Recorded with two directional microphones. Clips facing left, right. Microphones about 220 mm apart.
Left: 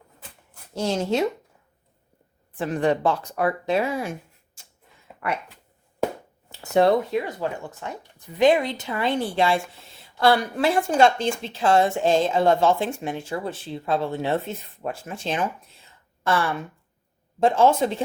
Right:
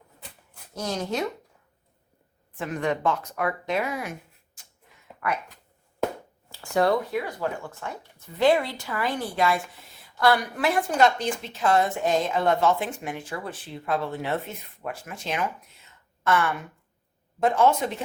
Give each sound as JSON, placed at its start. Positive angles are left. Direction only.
{"t": 0.7, "sound": "a woman's voice", "side_deg": 30}
{"t": 2.6, "sound": "speech", "side_deg": 30}
{"t": 5.2, "sound": "speech", "side_deg": 25}
{"t": 6.5, "sound": "a woman's voice", "side_deg": 25}